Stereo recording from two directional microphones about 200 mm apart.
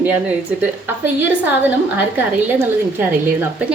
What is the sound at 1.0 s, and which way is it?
A woman's voice, 10° right (ahead or behind).